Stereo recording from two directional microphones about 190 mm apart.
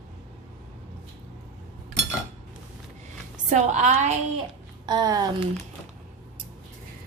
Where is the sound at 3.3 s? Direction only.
40° right (ahead or behind).